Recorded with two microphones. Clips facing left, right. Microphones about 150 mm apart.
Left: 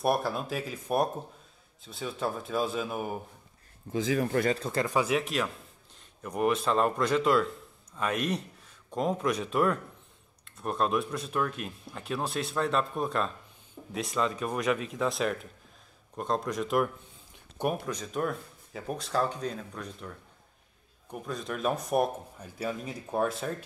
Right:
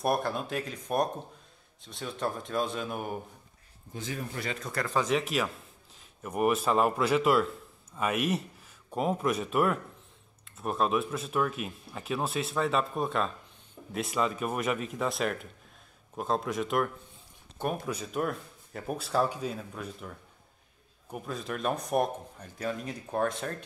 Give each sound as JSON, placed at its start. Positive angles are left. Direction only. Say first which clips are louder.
{"t": 0.0, "sound": "speech", "louder": "left 1 dB", "side_deg": 0}
{"t": 3.9, "sound": "speech", "louder": "left 10 dB", "side_deg": 80}
{"t": 4.6, "sound": "speech", "louder": "left 4 dB", "side_deg": 25}
{"t": 4.8, "sound": "a man's voice", "louder": "right 1 dB", "side_deg": 10}